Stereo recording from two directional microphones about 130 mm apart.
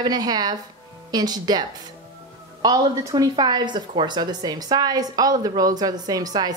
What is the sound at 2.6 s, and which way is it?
A woman's voice, 30° right (ahead or behind).